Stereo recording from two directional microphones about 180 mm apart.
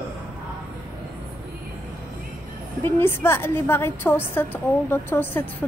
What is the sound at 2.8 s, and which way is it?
A woman's voice, 10° left (ahead or behind).